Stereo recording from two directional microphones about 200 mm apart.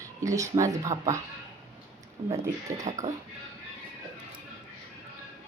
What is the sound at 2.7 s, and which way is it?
Speech, 15° right (ahead or behind).